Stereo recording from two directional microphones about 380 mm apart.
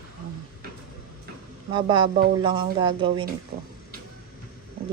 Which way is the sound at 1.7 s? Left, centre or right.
Centre.